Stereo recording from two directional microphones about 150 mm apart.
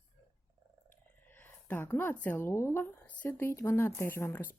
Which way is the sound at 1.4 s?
15° left (ahead or behind).